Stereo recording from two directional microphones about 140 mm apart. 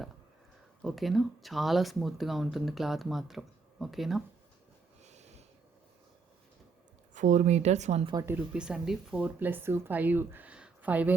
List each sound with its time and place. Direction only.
0.8 s speech: centre (ahead or behind)
5.0 s snort: 55° right (ahead or behind)
7.1 s speech: 60° right (ahead or behind)
8.3 s speech: 10° right (ahead or behind)